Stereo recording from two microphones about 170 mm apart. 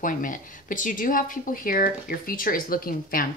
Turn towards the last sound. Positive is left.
turn(degrees=60)  # may be behind; listen again after turning